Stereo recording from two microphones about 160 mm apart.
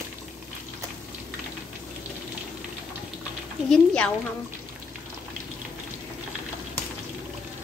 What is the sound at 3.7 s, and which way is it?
Speech, 5° left (ahead or behind).